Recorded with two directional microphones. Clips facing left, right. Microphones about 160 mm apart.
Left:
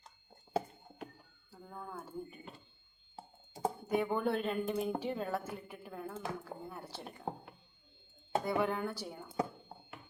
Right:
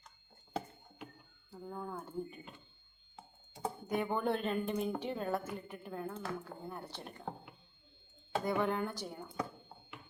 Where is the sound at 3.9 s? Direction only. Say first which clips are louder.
Left 1 dB; 10° left (ahead or behind).